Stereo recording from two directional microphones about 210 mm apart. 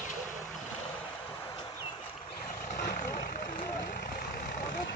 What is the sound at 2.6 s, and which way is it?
Vehicle, 35° left (ahead or behind).